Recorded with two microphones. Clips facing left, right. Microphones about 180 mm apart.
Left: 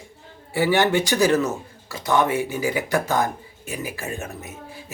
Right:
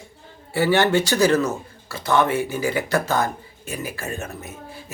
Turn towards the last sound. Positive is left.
turn(degrees=15)  # may be behind; listen again after turning